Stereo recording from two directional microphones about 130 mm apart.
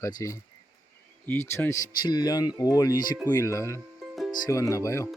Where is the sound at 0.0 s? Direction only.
25° left (ahead or behind).